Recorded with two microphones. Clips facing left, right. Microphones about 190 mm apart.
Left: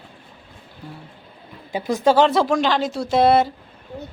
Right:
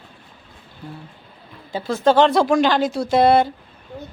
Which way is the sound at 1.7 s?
15° left (ahead or behind).